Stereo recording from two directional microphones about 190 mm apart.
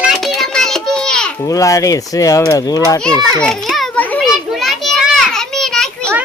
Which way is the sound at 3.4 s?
Centre (ahead or behind).